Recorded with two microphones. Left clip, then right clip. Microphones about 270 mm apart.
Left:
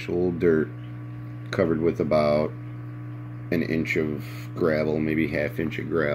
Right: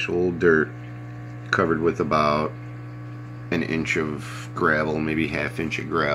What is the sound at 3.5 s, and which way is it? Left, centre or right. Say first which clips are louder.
Speech: right 1 dB; right.